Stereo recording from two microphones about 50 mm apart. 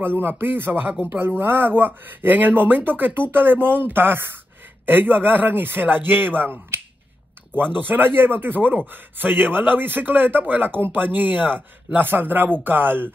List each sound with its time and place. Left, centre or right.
0.0 s speech: right